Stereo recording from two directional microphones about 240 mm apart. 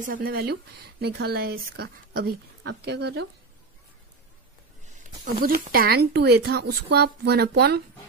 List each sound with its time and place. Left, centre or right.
0.0 s a woman's voice: right
5.2 s speech: right